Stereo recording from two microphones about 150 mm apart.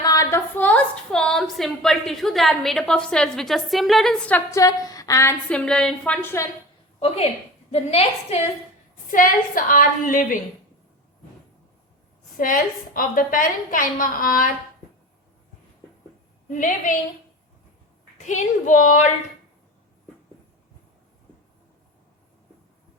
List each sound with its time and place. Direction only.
0.0 s a woman's voice: 25° left (ahead or behind); by 4.4 s 5° left (ahead or behind)
4.5 s a woman's voice: 25° left (ahead or behind)
5.5 s a woman's voice: 5° left (ahead or behind)
7.7 s a woman's voice: 45° left (ahead or behind)
9.0 s a woman's voice: 65° left (ahead or behind)
12.4 s a woman's voice: 65° left (ahead or behind)
16.5 s a woman's voice: 60° left (ahead or behind)
18.2 s a woman's voice: 55° left (ahead or behind)